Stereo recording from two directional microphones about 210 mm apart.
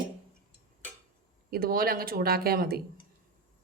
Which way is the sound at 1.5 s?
45° right (ahead or behind).